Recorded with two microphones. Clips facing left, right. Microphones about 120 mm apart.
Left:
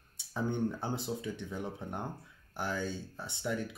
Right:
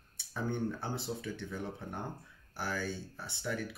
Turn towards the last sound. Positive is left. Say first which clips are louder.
# left 2 dB
turn(degrees=20)  # may be behind; listen again after turning